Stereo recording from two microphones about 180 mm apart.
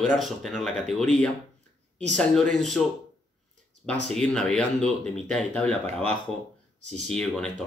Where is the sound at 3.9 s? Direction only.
5° left (ahead or behind).